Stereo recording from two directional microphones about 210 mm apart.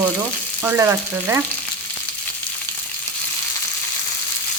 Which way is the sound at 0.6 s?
10° right (ahead or behind).